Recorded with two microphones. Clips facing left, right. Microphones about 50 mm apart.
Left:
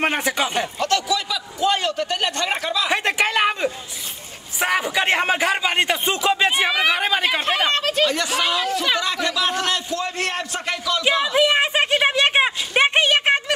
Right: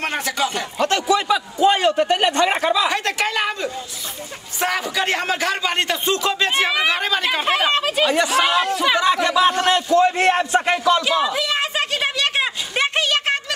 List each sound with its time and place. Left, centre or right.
0.0 s a man's voice: left
0.7 s a man's voice: right
2.9 s a sound: left
4.6 s a man's voice: centre
6.7 s speech: centre
7.0 s speech: centre
7.4 s speech: centre
9.0 s a man's voice: right
11.3 s a sound: left